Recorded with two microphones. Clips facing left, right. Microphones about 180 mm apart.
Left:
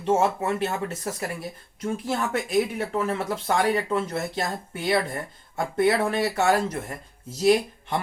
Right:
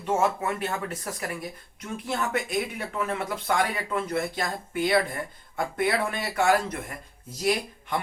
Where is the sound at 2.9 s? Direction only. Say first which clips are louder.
Left 2 dB; 30° left (ahead or behind).